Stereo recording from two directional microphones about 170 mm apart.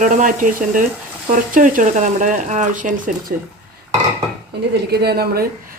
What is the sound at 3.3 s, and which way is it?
Speech, 60° right (ahead or behind).